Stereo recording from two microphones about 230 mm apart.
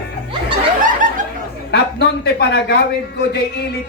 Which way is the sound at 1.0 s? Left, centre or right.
Right.